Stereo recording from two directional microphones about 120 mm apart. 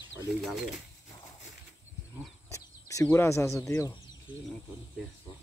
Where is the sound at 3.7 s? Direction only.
25° left (ahead or behind).